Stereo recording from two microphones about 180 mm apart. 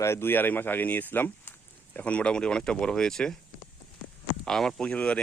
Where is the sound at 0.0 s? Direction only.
15° left (ahead or behind).